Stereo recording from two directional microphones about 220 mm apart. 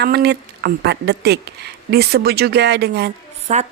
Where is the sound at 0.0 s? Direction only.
50° right (ahead or behind).